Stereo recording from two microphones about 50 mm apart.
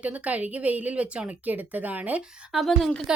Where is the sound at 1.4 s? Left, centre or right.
Right.